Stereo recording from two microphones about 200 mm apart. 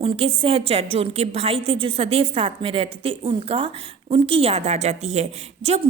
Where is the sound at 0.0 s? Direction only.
30° right (ahead or behind).